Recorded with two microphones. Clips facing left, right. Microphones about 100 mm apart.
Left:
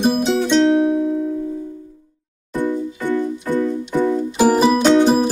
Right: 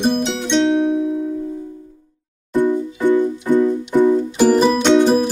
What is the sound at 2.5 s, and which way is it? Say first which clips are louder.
Music: right 4 dB; 20° right (ahead or behind).